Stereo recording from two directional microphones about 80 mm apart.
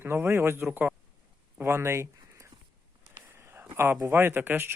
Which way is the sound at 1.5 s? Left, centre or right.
Right.